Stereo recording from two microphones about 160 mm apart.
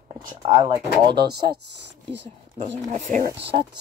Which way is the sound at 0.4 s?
25° right (ahead or behind).